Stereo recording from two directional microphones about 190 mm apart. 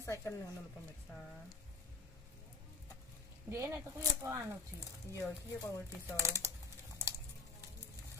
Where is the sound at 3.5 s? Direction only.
15° right (ahead or behind).